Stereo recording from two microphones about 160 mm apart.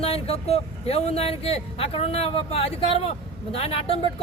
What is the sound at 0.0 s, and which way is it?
Speech, 40° left (ahead or behind).